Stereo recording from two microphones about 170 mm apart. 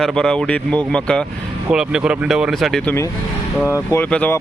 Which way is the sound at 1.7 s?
5° right (ahead or behind).